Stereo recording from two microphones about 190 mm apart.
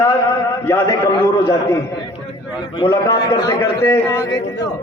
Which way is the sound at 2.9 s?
20° left (ahead or behind).